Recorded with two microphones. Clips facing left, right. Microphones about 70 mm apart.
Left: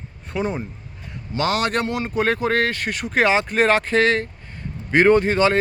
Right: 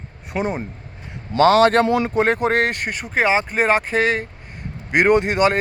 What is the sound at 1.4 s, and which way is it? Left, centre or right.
Speech, right.